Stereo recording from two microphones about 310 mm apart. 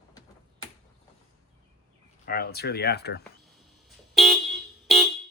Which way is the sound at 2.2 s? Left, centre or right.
Left.